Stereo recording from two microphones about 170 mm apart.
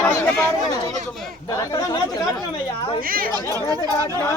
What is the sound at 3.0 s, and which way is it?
Speech, 60° right (ahead or behind).